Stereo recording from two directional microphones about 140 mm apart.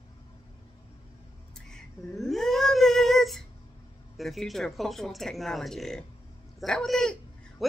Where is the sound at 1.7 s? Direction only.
Centre (ahead or behind).